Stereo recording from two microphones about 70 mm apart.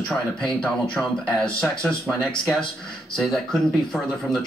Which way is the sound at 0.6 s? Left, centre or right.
Centre.